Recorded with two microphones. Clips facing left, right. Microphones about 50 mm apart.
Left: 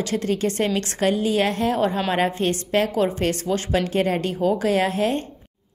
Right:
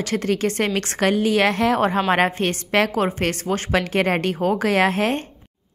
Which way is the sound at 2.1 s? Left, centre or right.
Right.